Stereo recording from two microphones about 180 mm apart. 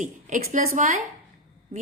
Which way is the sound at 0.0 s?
45° right (ahead or behind).